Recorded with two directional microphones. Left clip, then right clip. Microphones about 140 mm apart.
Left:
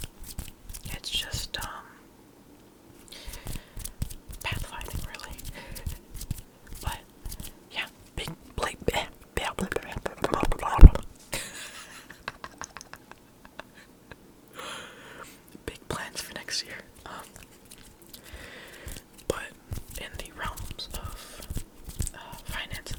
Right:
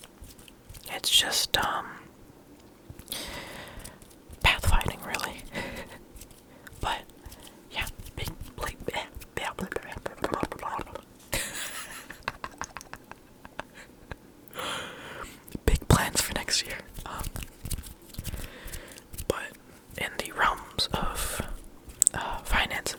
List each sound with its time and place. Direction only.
1.0 s whispering: 35° right (ahead or behind)
3.1 s horse: 30° right (ahead or behind)
4.4 s whispering: 35° right (ahead or behind)
7.7 s dog: 5° right (ahead or behind)
8.1 s whispering: 20° left (ahead or behind)
11.3 s a sound: 5° right (ahead or behind)
13.6 s a sound: 15° right (ahead or behind)
15.6 s whispering: 25° right (ahead or behind)
16.4 s whispering: 15° right (ahead or behind); by 19.5 s centre (ahead or behind)
20.0 s whispering: 20° right (ahead or behind)
20.2 s whispering: 35° right (ahead or behind)